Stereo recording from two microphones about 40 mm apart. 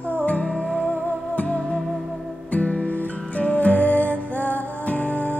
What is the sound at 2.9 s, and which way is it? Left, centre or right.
Music, left.